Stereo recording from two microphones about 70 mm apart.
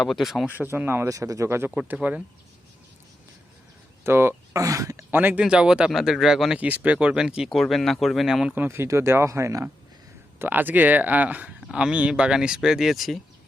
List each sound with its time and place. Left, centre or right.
0.0 s speech: centre
0.4 s speech: right
0.7 s speech: right
1.0 s speech: right
1.5 s speech: right
1.9 s speech: centre
4.0 s speech: right
4.5 s speech: right
5.1 s speech: right
5.4 s speech: centre
6.6 s speech: centre
7.5 s speech: centre
8.5 s speech: right
10.3 s speech: right; by 13.1 s centre